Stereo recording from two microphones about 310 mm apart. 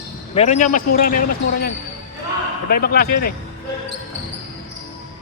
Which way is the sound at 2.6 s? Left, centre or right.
Left.